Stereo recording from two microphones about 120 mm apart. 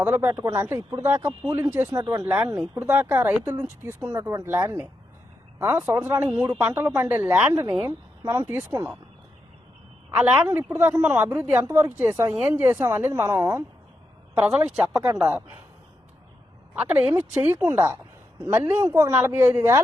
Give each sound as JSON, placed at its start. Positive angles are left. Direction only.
{"t": 0.0, "sound": "speech", "side_deg": -15}
{"t": 2.0, "sound": "speech", "side_deg": -30}
{"t": 2.2, "sound": "speech", "side_deg": -10}
{"t": 8.2, "sound": "speech", "side_deg": -35}
{"t": 8.4, "sound": "speech", "side_deg": -20}
{"t": 10.1, "sound": "speech", "side_deg": -10}
{"t": 12.3, "sound": "speech", "side_deg": -10}
{"t": 14.3, "sound": "speech", "side_deg": -5}
{"t": 16.7, "sound": "speech", "side_deg": -10}